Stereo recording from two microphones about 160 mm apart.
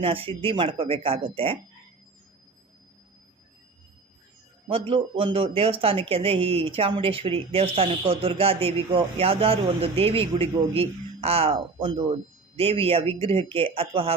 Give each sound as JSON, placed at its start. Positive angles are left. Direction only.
{"t": 0.0, "sound": "a woman's voice", "side_deg": -35}
{"t": 4.7, "sound": "a woman's voice", "side_deg": -35}